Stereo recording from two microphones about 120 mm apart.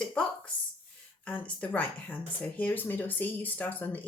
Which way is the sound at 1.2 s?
10° left (ahead or behind).